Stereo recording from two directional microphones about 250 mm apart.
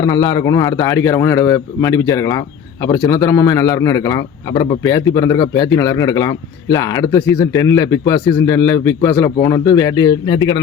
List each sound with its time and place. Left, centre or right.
0.0 s a man's voice: centre